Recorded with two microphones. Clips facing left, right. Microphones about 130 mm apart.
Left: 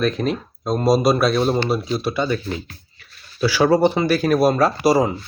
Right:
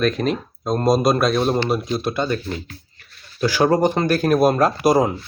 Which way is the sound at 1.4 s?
5° right (ahead or behind).